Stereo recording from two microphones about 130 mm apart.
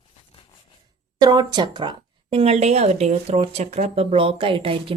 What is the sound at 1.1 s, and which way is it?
Speech, 30° right (ahead or behind).